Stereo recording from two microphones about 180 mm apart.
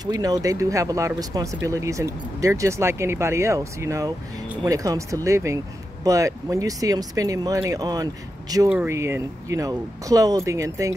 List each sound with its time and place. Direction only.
0.0 s speech: 20° right (ahead or behind)